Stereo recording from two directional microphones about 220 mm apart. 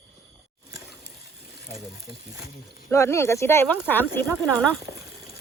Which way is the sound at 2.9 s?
15° left (ahead or behind).